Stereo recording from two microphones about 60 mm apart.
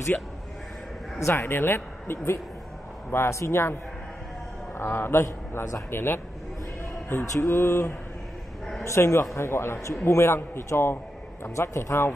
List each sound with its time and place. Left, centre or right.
1.2 s speech: left
4.7 s speech: left
5.9 s mantra: left
8.8 s speech: left